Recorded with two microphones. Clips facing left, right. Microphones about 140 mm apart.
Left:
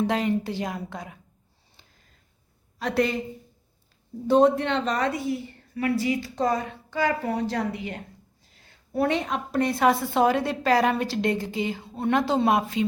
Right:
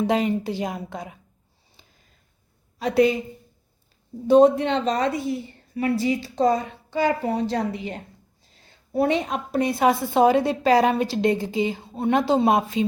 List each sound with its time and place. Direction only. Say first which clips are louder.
0.1 s a woman's voice: right 3 dB; 20° right (ahead or behind)
2.7 s speech: right 5 dB; 10° right (ahead or behind)
4.3 s a woman's voice: right 4 dB; 15° right (ahead or behind)
8.5 s a sound: right 3 dB; 25° right (ahead or behind)
9.3 s a woman's voice: right 1 dB; 10° right (ahead or behind)